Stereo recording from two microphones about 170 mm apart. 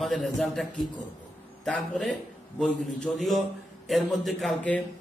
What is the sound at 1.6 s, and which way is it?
A man's voice, centre (ahead or behind).